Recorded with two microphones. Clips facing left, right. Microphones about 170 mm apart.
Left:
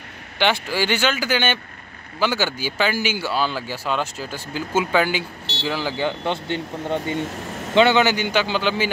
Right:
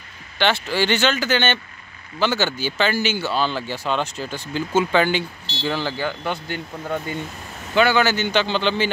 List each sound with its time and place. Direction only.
0.4 s speech: 10° left (ahead or behind)
5.9 s speech: 25° left (ahead or behind); by 8.9 s 5° left (ahead or behind)